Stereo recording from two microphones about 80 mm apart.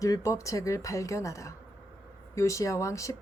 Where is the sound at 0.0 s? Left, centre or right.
Left.